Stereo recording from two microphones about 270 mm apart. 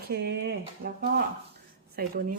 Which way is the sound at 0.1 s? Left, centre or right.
Right.